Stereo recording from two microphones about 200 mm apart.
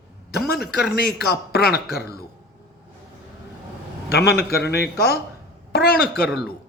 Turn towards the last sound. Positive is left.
turn(degrees=50)  # may be behind; listen again after turning